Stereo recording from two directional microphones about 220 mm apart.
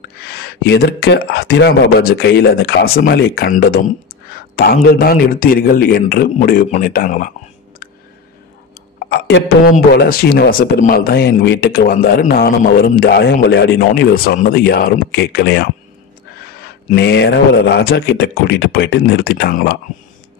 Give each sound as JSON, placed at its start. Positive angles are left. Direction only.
{"t": 0.3, "sound": "speech", "side_deg": 45}
{"t": 4.8, "sound": "a man's voice", "side_deg": 40}
{"t": 9.1, "sound": "speech", "side_deg": 45}